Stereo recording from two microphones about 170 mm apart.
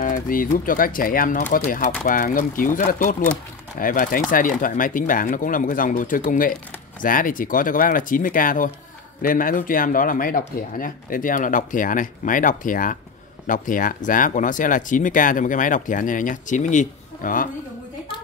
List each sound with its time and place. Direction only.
0.0 s speech: 50° left (ahead or behind)